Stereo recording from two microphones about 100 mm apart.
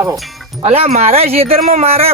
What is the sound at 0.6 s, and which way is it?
Speech, 85° right.